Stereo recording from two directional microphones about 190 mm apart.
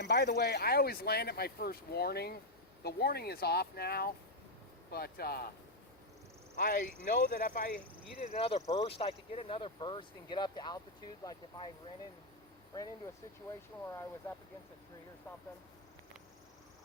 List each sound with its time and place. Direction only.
0.0 s speech: 60° left (ahead or behind)
6.6 s speech: 45° left (ahead or behind)
8.2 s speech: 30° left (ahead or behind)
13.8 s speech: 15° left (ahead or behind)